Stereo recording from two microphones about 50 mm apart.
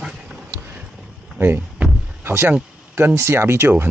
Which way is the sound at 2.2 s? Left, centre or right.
Right.